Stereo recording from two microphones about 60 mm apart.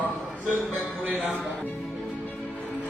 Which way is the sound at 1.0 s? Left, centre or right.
Right.